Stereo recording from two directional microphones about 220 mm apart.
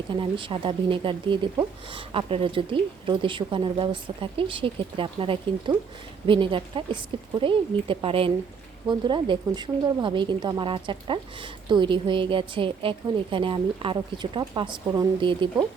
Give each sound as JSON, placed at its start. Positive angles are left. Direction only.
{"t": 0.1, "sound": "a woman's voice", "side_deg": -20}